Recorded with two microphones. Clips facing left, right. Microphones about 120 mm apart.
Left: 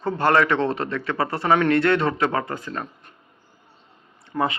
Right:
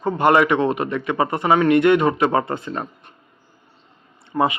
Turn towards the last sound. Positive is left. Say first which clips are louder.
# right 4 dB
turn(degrees=-20)  # may be behind; listen again after turning